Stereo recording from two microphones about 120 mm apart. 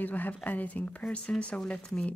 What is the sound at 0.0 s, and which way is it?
Speech, 15° left (ahead or behind).